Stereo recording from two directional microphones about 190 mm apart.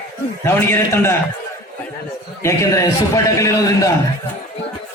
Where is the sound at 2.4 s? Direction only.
15° left (ahead or behind).